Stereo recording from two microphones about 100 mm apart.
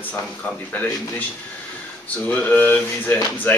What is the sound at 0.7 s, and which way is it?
Speech, 15° left (ahead or behind).